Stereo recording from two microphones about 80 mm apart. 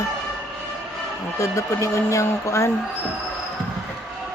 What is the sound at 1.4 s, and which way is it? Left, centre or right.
Speech, left.